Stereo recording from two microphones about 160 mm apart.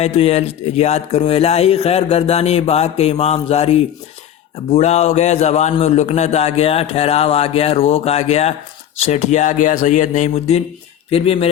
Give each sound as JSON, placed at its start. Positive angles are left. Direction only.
{"t": 0.0, "sound": "speech", "side_deg": 40}